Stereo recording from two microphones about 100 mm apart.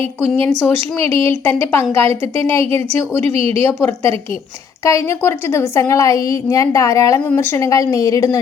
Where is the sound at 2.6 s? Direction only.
80° right.